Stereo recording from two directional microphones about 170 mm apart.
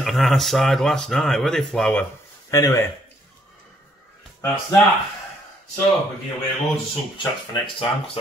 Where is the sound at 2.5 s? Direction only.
15° left (ahead or behind).